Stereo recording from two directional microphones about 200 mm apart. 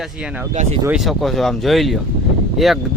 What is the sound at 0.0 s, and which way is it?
Speech, 5° right (ahead or behind).